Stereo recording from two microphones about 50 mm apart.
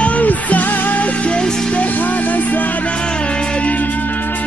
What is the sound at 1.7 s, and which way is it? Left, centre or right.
Music, left.